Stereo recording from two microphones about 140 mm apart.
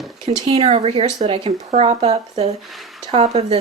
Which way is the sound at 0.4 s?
45° right (ahead or behind).